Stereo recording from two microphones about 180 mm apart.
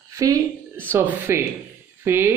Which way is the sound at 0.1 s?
20° right (ahead or behind).